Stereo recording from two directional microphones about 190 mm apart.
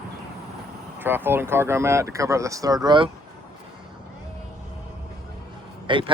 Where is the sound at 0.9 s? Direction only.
10° right (ahead or behind).